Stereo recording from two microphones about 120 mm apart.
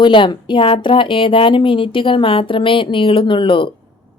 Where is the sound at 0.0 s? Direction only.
40° left (ahead or behind).